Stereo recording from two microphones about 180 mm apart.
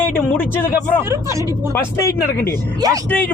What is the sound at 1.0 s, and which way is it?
Speech, 15° right (ahead or behind).